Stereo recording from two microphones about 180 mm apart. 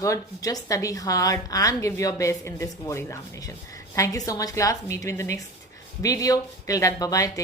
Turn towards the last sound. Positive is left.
turn(degrees=20)  # may be behind; listen again after turning